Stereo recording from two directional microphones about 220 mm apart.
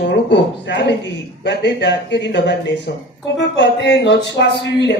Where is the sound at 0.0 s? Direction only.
55° left (ahead or behind).